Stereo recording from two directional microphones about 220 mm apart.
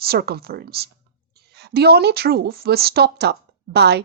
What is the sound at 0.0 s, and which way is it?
Speech, 45° right (ahead or behind).